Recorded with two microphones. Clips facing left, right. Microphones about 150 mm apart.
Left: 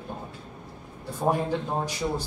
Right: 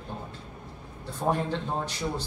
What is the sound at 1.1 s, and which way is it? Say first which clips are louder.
Speech: left 2 dB; 10° left (ahead or behind).